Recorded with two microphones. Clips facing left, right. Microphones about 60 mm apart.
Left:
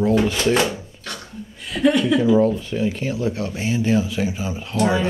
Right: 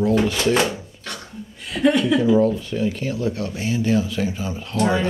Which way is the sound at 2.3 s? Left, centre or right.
Left.